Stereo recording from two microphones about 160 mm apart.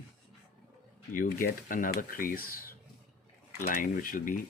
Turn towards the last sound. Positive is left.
turn(degrees=60)  # may be behind; listen again after turning